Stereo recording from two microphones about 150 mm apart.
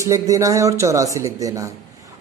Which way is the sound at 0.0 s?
20° right (ahead or behind).